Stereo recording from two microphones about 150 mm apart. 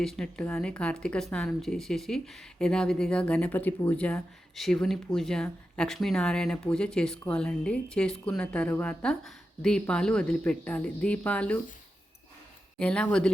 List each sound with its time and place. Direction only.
0.0 s speech: 5° left (ahead or behind)
12.8 s speech: 5° left (ahead or behind)